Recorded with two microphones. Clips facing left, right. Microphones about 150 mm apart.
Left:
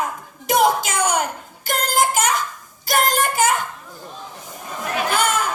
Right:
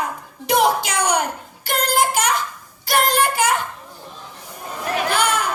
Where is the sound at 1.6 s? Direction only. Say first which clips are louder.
Right 1 dB; 45° left (ahead or behind).